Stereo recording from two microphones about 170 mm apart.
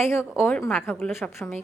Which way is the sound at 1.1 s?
Centre (ahead or behind).